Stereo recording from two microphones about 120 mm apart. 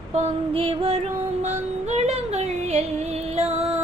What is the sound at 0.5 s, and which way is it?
Music, 50° right (ahead or behind).